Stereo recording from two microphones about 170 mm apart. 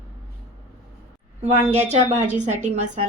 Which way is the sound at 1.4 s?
40° right (ahead or behind).